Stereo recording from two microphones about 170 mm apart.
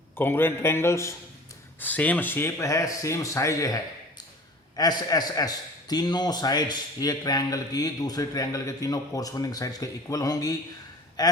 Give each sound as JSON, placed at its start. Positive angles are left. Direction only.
{"t": 0.2, "sound": "speech", "side_deg": 15}
{"t": 4.8, "sound": "a man's voice", "side_deg": 25}